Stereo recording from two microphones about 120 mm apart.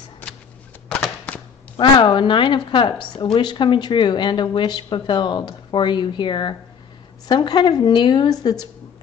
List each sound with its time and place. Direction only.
0.2 s shuffling cards: 15° left (ahead or behind)
0.8 s a sound: 10° left (ahead or behind)
1.8 s a woman's voice: 45° left (ahead or behind)